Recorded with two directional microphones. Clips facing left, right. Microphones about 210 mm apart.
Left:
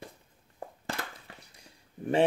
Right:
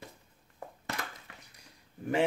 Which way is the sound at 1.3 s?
30° left (ahead or behind).